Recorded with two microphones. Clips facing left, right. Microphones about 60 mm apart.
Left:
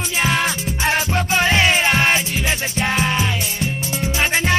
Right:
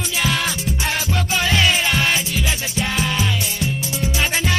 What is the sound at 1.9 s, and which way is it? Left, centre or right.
Music, left.